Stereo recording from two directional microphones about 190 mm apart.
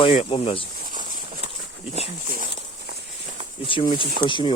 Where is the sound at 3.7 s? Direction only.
25° left (ahead or behind).